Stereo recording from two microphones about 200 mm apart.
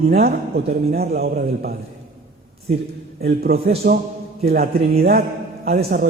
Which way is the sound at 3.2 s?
50° right (ahead or behind).